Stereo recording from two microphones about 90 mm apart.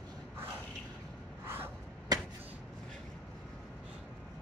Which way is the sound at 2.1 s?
45° right (ahead or behind).